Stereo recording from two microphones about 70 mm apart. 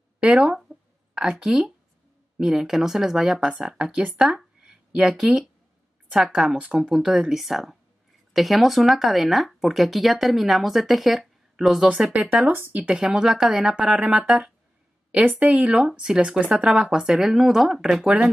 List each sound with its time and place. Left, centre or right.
0.2 s speech: centre
4.2 s a woman's voice: centre; by 12.9 s right
12.9 s speech: centre
15.0 s a woman's voice: right
16.6 s speech: centre
18.0 s speech: centre